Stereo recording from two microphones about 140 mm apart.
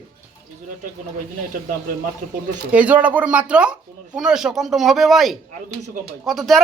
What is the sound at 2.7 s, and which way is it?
Speech, 10° right (ahead or behind).